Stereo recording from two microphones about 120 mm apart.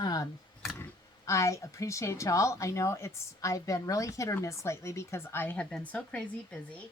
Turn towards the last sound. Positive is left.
turn(degrees=10)  # may be behind; listen again after turning